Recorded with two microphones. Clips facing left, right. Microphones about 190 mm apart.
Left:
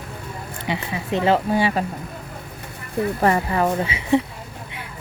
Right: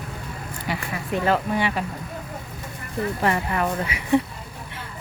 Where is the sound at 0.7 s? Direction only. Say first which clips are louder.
Left 3 dB; 20° left (ahead or behind).